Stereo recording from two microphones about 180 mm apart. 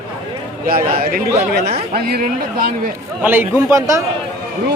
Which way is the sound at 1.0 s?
60° right (ahead or behind).